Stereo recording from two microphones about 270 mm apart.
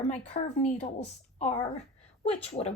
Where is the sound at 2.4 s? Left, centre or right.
Left.